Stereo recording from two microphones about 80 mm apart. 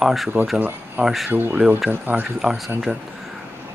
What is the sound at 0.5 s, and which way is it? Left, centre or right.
Speech, right.